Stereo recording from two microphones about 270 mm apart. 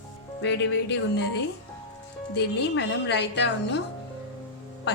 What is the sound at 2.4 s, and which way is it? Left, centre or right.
Speech, left.